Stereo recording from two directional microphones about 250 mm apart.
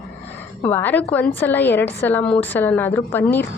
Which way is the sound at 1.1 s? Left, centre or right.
Centre.